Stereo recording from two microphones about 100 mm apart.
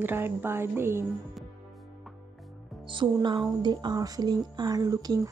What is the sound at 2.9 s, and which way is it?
Speech, 50° right (ahead or behind).